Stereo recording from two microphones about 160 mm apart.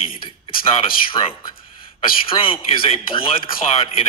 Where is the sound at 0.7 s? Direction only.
35° left (ahead or behind).